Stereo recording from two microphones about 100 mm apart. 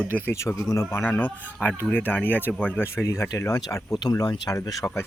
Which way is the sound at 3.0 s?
30° left (ahead or behind).